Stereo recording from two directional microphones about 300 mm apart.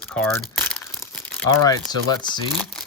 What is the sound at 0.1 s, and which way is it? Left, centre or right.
Crumpling, centre.